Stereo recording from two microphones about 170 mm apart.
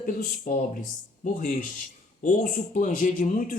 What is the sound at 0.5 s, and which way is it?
A man's voice, 50° left (ahead or behind).